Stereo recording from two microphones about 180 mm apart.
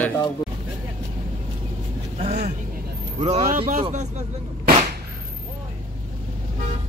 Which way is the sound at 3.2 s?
30° right (ahead or behind).